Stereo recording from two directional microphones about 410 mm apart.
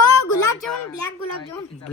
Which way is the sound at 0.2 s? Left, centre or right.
Left.